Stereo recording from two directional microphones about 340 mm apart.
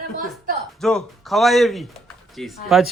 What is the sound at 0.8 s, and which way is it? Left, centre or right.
Speech, centre.